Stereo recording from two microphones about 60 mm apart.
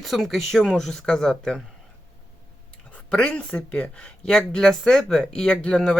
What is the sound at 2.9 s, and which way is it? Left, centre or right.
Speech, centre.